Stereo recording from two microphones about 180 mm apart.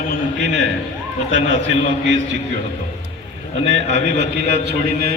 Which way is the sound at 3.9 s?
70° right (ahead or behind).